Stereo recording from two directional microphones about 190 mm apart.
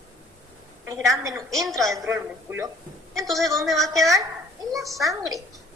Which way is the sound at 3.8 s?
15° right (ahead or behind).